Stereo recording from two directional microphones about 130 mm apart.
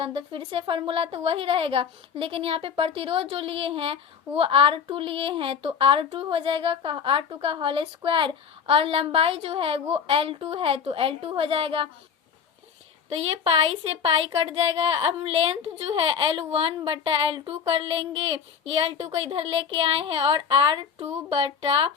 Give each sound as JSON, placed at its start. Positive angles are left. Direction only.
{"t": 0.0, "sound": "a child's voice", "side_deg": -40}
{"t": 13.1, "sound": "a child's voice", "side_deg": -50}